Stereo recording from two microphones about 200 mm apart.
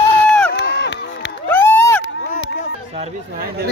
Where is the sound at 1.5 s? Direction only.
10° left (ahead or behind).